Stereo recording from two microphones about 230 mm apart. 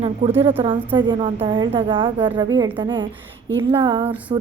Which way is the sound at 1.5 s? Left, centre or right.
Right.